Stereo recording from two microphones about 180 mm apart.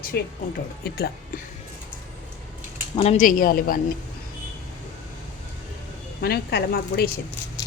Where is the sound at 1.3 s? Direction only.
50° left (ahead or behind).